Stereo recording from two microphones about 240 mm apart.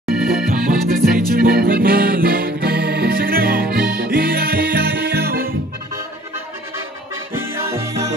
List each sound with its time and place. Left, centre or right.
0.1 s accordion: centre
0.5 s music: right
7.3 s music: centre